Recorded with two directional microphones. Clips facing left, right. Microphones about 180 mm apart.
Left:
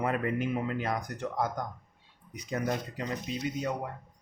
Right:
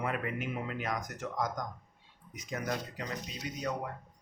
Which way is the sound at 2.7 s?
25° left (ahead or behind).